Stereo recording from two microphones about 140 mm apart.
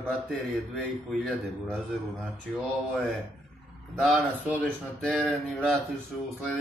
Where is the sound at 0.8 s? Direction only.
5° left (ahead or behind).